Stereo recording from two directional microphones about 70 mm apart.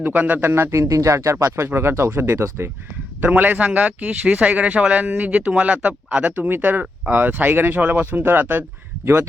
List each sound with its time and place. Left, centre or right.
0.0 s speech: right
0.5 s speech: right
1.6 s speech: right
3.2 s speech: right